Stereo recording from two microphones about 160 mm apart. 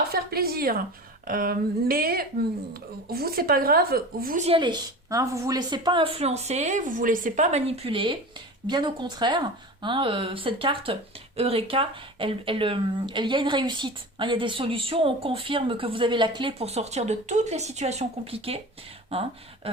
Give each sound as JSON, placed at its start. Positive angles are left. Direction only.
{"t": 0.1, "sound": "speech", "side_deg": -70}
{"t": 4.4, "sound": "speech", "side_deg": -35}